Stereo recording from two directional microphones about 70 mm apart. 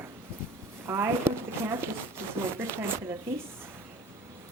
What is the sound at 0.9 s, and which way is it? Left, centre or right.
A woman's voice, right.